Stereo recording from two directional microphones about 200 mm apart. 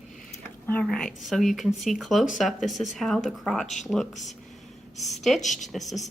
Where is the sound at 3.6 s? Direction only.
35° left (ahead or behind).